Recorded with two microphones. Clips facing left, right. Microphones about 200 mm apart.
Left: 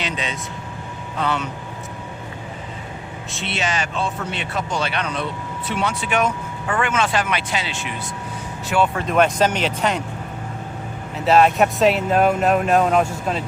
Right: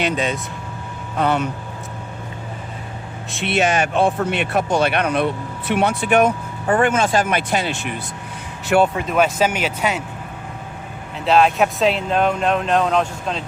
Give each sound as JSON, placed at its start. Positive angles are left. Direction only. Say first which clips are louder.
{"t": 0.0, "sound": "speech", "louder": "right 6 dB", "side_deg": -50}
{"t": 3.3, "sound": "speech", "louder": "right 7 dB", "side_deg": -55}
{"t": 6.7, "sound": "speech", "louder": "right 5 dB", "side_deg": -45}
{"t": 9.0, "sound": "speech", "louder": "even", "side_deg": -5}
{"t": 11.3, "sound": "speech", "louder": "even", "side_deg": 0}